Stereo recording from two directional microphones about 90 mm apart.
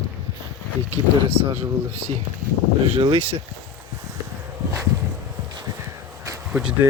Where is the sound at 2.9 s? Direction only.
90° right.